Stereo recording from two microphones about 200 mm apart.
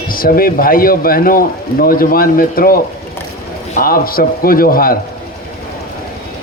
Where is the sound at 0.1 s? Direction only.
45° left (ahead or behind).